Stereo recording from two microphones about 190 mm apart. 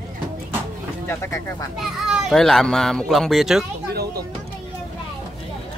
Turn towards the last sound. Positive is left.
turn(degrees=-55)  # may be behind; listen again after turning